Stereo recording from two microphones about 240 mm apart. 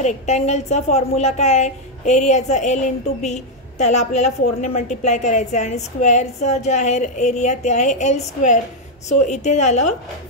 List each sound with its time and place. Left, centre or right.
0.0 s a woman's voice: left